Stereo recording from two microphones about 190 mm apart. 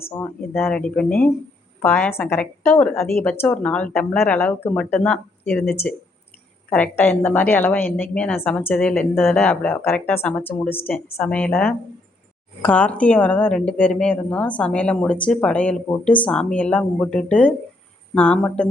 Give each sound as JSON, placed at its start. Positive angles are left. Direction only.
{"t": 0.2, "sound": "a woman's voice", "side_deg": 10}